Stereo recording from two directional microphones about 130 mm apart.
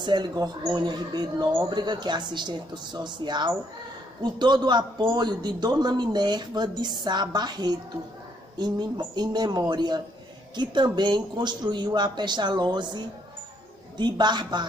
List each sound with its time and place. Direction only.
0.0 s a man's voice: 35° right (ahead or behind)